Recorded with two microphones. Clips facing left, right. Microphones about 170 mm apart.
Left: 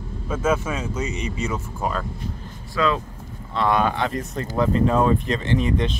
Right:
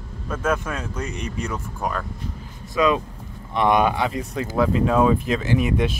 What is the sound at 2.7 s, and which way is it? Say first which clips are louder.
Speech: right 3 dB; 20° right (ahead or behind).